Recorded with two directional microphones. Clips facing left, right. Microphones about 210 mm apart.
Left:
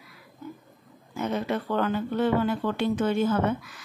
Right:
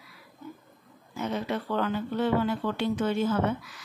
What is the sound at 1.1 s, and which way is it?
Speech, 50° left (ahead or behind).